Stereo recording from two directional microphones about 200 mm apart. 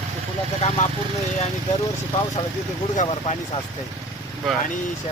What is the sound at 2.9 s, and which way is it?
Speech, 35° left (ahead or behind).